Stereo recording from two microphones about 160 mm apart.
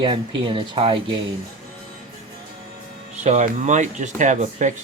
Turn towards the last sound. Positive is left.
turn(degrees=-50)  # may be behind; listen again after turning